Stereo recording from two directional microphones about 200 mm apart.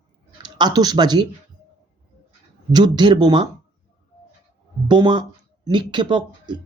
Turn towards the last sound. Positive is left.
turn(degrees=-20)  # may be behind; listen again after turning